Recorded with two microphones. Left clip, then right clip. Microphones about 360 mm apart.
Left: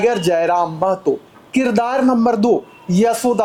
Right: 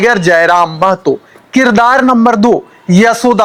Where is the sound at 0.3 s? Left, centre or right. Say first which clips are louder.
Right 8 dB; right.